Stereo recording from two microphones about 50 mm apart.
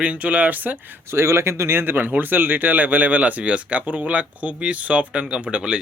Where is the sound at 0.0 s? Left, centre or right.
Right.